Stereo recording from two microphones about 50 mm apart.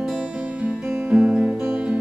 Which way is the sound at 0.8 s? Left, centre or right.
Right.